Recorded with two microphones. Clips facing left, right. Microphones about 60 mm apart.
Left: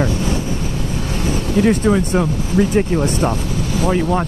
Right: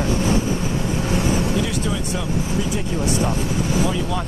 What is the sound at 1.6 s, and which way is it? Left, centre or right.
Speech, left.